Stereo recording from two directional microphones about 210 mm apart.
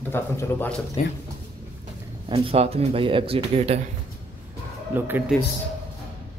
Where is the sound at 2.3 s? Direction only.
25° right (ahead or behind).